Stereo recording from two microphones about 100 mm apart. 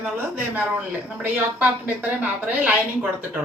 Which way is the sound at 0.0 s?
15° right (ahead or behind).